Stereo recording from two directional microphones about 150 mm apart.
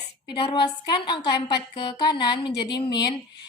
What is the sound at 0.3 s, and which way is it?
A woman's voice, 35° left (ahead or behind).